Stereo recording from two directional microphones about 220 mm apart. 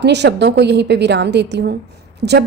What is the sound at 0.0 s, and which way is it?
A woman's voice, 50° right (ahead or behind).